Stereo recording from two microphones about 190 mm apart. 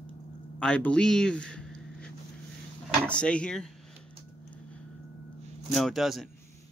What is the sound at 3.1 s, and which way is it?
Speech, 5° left (ahead or behind).